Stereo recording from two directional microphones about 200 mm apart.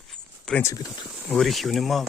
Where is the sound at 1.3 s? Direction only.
Centre (ahead or behind).